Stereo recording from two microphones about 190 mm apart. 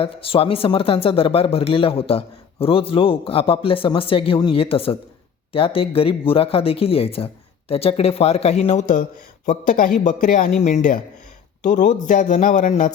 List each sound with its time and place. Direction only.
0.0 s a man's voice: 30° left (ahead or behind)